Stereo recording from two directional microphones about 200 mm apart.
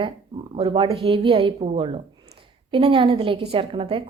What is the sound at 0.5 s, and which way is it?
A woman's voice, 30° right (ahead or behind).